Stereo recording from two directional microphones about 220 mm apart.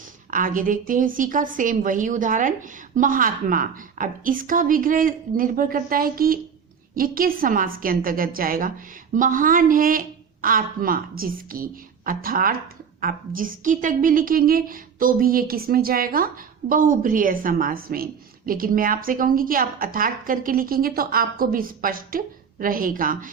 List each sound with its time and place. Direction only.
0.3 s a woman's voice: 40° right (ahead or behind)